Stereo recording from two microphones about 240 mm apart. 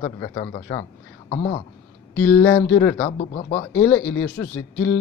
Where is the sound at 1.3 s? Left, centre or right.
Left.